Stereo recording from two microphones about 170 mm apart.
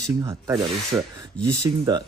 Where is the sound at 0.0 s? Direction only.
15° right (ahead or behind).